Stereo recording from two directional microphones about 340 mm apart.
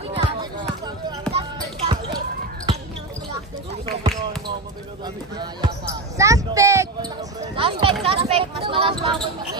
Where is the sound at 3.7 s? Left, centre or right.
Centre.